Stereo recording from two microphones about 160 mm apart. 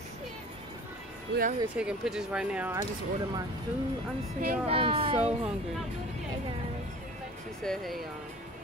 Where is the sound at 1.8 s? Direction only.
5° right (ahead or behind).